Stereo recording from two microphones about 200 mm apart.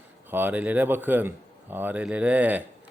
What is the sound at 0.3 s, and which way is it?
Speech, 10° right (ahead or behind).